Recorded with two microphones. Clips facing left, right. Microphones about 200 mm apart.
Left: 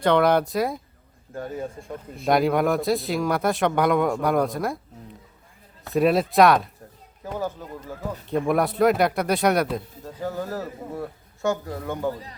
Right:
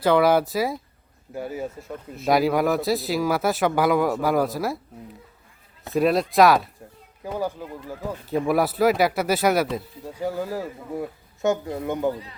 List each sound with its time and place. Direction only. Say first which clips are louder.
0.0 s a man's voice: right 1 dB; 5° right (ahead or behind)
5.9 s a man's voice: left 1 dB; centre (ahead or behind); by 12.1 s 20° right (ahead or behind)